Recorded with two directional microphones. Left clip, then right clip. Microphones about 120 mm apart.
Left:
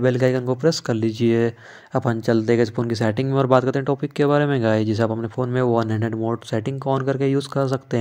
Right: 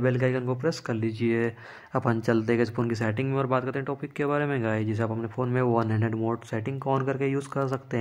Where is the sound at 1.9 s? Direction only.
15° left (ahead or behind).